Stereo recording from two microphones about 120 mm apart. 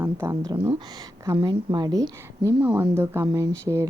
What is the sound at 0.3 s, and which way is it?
A woman's voice, 35° right (ahead or behind).